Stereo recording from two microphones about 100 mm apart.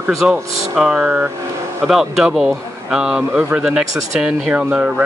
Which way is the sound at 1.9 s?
5° right (ahead or behind).